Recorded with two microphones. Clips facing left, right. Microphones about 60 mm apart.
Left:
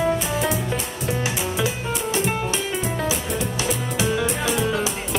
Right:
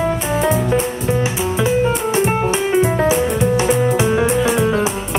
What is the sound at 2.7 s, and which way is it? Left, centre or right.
Music, right.